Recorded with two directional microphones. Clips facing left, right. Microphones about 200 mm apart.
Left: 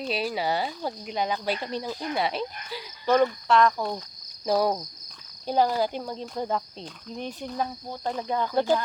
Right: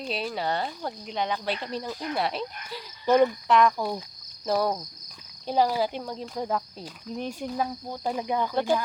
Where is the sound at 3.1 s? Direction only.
15° right (ahead or behind).